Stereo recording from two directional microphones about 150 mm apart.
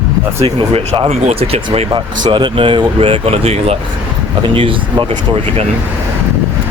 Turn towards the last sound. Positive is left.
turn(degrees=-35)  # may be behind; listen again after turning